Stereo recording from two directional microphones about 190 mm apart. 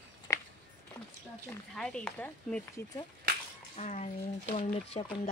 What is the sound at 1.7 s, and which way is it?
Speech, 5° left (ahead or behind).